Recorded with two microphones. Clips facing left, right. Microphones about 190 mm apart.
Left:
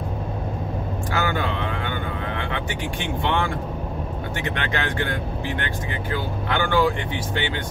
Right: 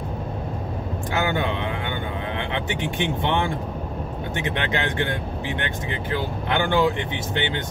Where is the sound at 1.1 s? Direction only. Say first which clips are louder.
Right 1 dB; 20° right (ahead or behind).